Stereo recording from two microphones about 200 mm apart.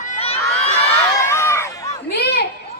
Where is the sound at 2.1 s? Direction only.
55° left (ahead or behind).